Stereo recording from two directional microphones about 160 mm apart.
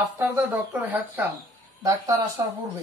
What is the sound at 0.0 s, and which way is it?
A woman's voice, 10° right (ahead or behind).